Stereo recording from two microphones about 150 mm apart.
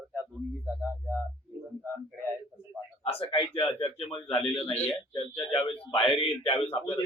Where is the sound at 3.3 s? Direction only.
35° left (ahead or behind).